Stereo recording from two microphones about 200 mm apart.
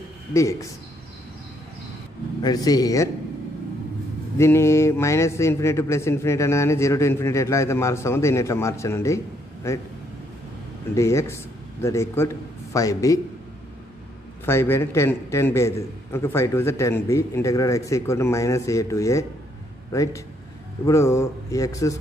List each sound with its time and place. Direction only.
0.3 s speech: 15° left (ahead or behind)
2.4 s speech: 20° left (ahead or behind)
4.4 s speech: 15° left (ahead or behind)
11.0 s speech: 15° left (ahead or behind)
14.4 s speech: 10° left (ahead or behind)